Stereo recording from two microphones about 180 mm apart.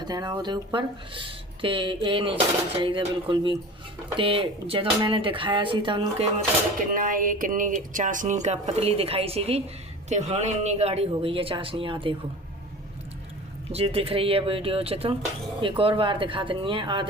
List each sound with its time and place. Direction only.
0.0 s speech: 20° right (ahead or behind)
6.9 s speech: 50° right (ahead or behind); by 12.1 s 30° right (ahead or behind)
13.7 s speech: 35° right (ahead or behind)